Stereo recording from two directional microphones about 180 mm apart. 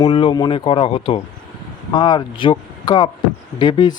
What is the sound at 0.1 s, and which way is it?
Speech, 30° left (ahead or behind).